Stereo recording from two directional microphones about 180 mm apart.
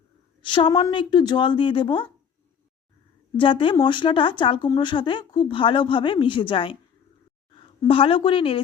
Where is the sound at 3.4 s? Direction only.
30° left (ahead or behind).